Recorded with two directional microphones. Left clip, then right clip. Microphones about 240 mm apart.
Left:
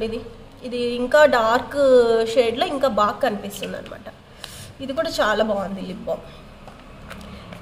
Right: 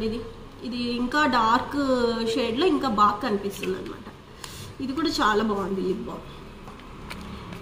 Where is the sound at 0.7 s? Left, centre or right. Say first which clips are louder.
Left 8 dB; left.